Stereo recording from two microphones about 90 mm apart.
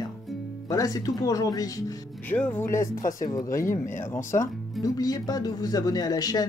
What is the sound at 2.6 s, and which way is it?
Speech, 35° left (ahead or behind).